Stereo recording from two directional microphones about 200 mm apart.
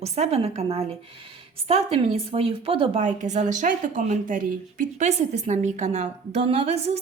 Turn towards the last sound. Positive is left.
turn(degrees=-30)  # may be behind; listen again after turning